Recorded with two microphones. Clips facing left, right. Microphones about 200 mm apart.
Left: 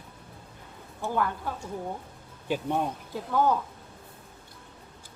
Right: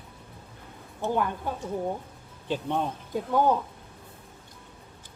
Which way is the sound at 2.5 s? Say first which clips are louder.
Even; 10° left (ahead or behind).